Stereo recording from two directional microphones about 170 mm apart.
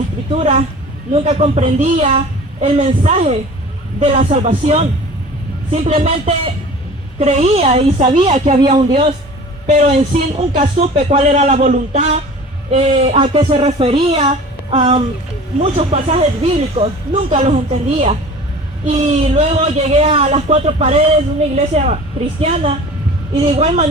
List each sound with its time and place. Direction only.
0.3 s a man's voice: 40° right (ahead or behind)
18.9 s a man's voice: 40° right (ahead or behind)